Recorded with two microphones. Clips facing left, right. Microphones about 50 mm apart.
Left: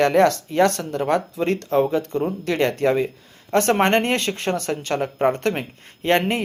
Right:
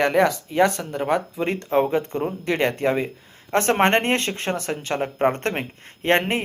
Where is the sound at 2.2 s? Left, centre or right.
Centre.